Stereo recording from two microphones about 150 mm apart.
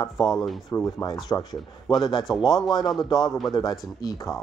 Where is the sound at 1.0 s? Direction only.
25° left (ahead or behind).